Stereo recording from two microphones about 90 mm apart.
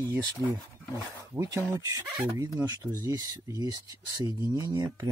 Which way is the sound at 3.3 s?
45° right (ahead or behind).